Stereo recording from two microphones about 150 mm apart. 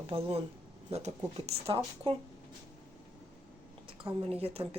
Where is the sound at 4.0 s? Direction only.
35° right (ahead or behind).